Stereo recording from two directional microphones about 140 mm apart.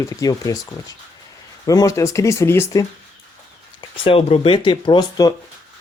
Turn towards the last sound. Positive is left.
turn(degrees=30)  # may be behind; listen again after turning